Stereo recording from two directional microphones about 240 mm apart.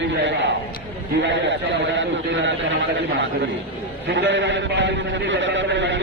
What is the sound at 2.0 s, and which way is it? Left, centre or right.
Speech, right.